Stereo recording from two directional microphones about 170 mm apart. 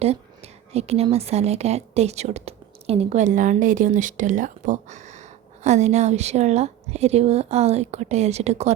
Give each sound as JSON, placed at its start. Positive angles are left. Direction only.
{"t": 0.0, "sound": "speech", "side_deg": -35}